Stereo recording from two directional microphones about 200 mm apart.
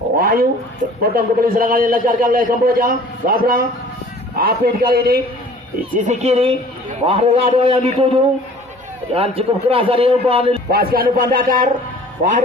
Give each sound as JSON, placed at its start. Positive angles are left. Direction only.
{"t": 0.2, "sound": "cat", "side_deg": -50}
{"t": 1.1, "sound": "a man's voice", "side_deg": -45}
{"t": 6.1, "sound": "a man's voice", "side_deg": -30}
{"t": 10.7, "sound": "a man's voice", "side_deg": -45}